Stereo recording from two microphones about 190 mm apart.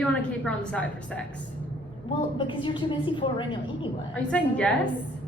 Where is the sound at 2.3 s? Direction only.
25° left (ahead or behind).